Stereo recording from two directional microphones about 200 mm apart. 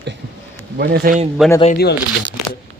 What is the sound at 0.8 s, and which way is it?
Speech, 50° right (ahead or behind).